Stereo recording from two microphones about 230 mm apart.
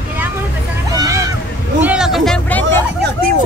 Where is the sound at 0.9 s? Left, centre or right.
Centre.